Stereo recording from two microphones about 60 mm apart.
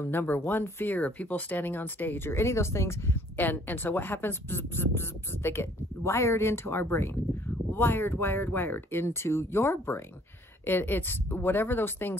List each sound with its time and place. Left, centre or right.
0.0 s speech: left
3.3 s speech: left